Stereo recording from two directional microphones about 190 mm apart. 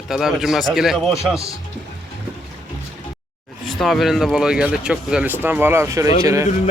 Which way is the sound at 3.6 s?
Centre (ahead or behind).